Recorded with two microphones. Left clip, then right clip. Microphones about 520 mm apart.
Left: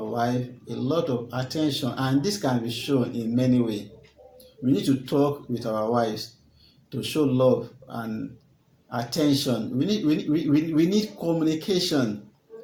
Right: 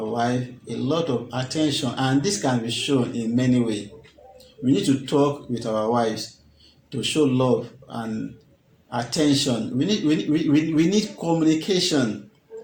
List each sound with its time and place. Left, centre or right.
0.1 s speech: left